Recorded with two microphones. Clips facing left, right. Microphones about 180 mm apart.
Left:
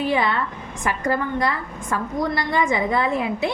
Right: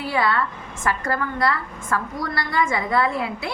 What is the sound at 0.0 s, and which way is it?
A woman's voice, 20° left (ahead or behind).